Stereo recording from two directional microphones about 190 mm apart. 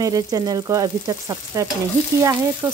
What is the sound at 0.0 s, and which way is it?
Speech, 20° right (ahead or behind).